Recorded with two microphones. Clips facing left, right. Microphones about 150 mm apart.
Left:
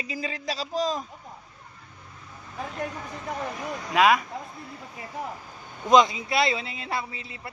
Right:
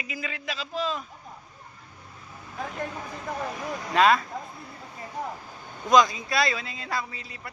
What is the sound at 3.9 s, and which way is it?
Speech, 10° left (ahead or behind).